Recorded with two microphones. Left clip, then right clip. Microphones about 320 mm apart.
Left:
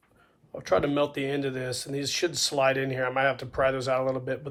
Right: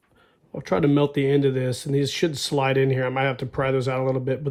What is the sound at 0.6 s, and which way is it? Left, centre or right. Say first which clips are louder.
Speech: right 3 dB; right.